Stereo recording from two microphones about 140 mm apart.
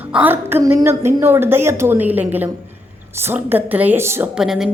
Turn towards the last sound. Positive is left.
turn(degrees=0)  # may be behind; listen again after turning